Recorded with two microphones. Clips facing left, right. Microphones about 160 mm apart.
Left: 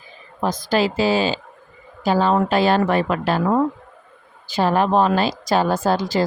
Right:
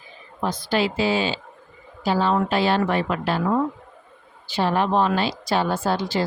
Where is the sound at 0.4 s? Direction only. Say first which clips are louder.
Left 3 dB; 45° left (ahead or behind).